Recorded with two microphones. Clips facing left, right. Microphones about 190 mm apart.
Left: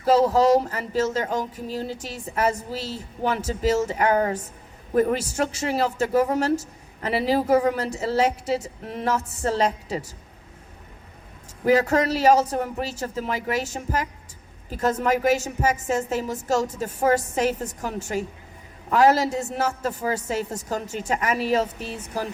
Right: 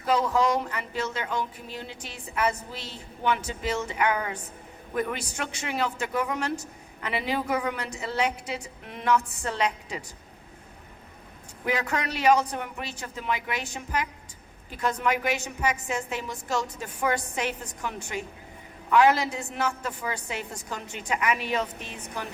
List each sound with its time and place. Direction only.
0.0 s speech: 35° left (ahead or behind)
11.6 s speech: 40° left (ahead or behind)